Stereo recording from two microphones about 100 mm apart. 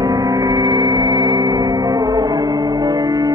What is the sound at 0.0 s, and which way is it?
Music, 35° right (ahead or behind).